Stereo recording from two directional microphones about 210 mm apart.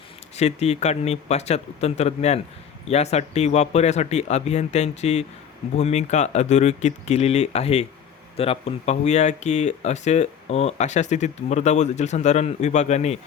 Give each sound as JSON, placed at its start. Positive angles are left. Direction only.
{"t": 0.3, "sound": "speech", "side_deg": 30}